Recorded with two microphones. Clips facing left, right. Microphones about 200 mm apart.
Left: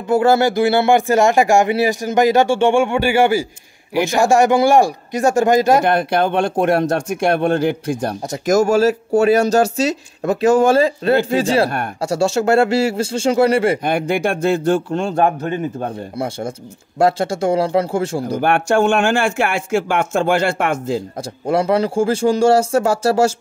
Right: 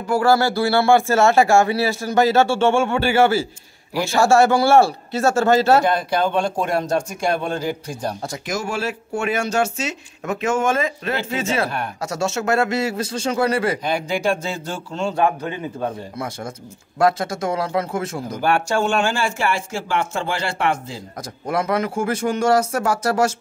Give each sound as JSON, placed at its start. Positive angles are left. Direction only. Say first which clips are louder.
{"t": 0.1, "sound": "speech", "louder": "left 3 dB", "side_deg": 20}
{"t": 5.9, "sound": "speech", "louder": "left 4 dB", "side_deg": 60}
{"t": 8.5, "sound": "speech", "louder": "left 12 dB", "side_deg": 45}
{"t": 13.8, "sound": "speech", "louder": "left 3 dB", "side_deg": 55}
{"t": 16.2, "sound": "speech", "louder": "left 6 dB", "side_deg": 25}
{"t": 18.4, "sound": "speech", "louder": "left 4 dB", "side_deg": 55}
{"t": 21.2, "sound": "speech", "louder": "left 2 dB", "side_deg": 30}